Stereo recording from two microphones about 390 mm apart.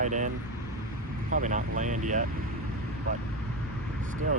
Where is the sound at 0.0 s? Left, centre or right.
Centre.